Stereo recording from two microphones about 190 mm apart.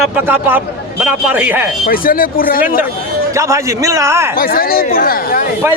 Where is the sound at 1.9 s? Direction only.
50° left (ahead or behind).